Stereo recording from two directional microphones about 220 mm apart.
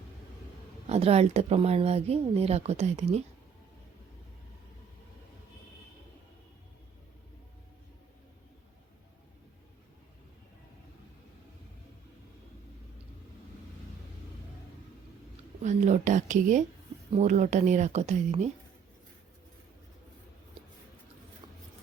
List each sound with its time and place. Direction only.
0.9 s speech: 30° right (ahead or behind)
15.6 s a sound: 35° right (ahead or behind)
17.1 s a woman's voice: 30° right (ahead or behind)